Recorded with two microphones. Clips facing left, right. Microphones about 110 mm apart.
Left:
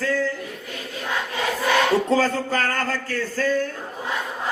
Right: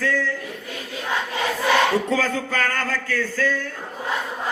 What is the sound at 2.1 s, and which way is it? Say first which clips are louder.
Speech: left 2 dB; 35° left (ahead or behind).